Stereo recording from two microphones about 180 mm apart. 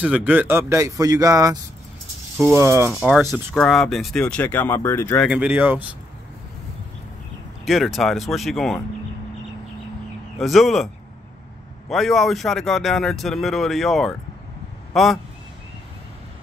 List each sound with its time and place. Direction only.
0.0 s speech: 10° right (ahead or behind)
3.5 s speech: centre (ahead or behind)
5.3 s speech: 10° right (ahead or behind)
7.6 s speech: centre (ahead or behind)
10.4 s speech: centre (ahead or behind)
11.9 s speech: centre (ahead or behind)